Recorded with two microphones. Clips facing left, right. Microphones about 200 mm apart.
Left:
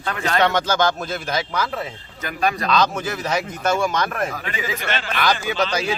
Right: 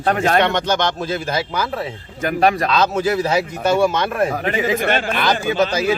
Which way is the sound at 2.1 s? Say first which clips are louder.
Right 7 dB; 50° right (ahead or behind).